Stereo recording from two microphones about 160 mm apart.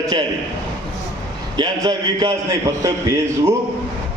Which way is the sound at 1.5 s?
25° right (ahead or behind).